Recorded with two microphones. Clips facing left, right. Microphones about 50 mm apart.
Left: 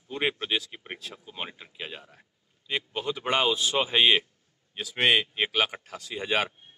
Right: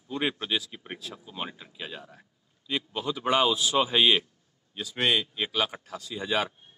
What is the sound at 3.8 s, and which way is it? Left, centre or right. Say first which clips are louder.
Speech: even; centre.